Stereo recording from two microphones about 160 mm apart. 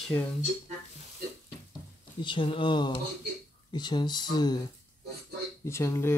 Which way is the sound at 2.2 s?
30° left (ahead or behind).